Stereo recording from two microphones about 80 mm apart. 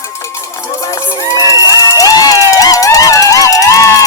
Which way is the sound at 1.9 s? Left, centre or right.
Left.